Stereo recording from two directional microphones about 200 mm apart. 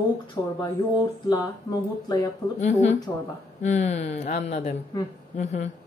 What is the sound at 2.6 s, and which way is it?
A woman's voice, 35° left (ahead or behind).